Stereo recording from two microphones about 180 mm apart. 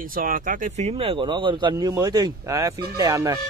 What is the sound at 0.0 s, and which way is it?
A man's voice, 50° right (ahead or behind).